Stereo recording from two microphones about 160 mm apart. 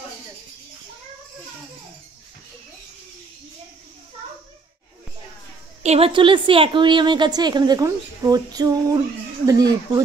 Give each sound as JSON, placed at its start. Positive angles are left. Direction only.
{"t": 5.8, "sound": "a woman's voice", "side_deg": -40}